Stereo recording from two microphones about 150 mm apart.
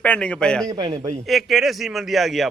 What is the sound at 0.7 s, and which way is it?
Speech, 30° right (ahead or behind).